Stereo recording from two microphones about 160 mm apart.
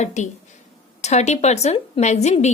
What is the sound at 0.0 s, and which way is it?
A woman's voice, 45° left (ahead or behind).